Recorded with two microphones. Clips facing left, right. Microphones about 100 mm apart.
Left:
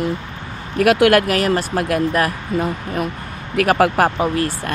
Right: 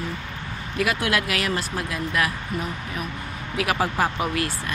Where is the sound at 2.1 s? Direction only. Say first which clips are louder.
Left 6 dB; 45° left (ahead or behind).